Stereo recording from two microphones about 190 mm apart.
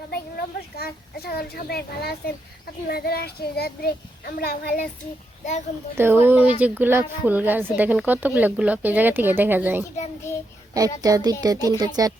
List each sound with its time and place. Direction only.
0.1 s speech: 55° left (ahead or behind)
6.0 s speech: 10° right (ahead or behind)
10.3 s child singing: 15° left (ahead or behind)
10.8 s speech: 20° right (ahead or behind)